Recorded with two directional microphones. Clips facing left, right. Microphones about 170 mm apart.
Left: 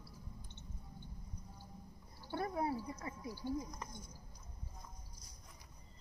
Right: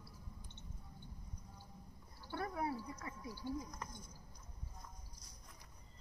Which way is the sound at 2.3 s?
25° left (ahead or behind).